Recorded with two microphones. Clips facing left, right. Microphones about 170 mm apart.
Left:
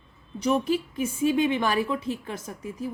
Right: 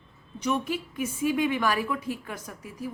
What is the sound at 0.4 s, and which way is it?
A woman's voice, 30° left (ahead or behind).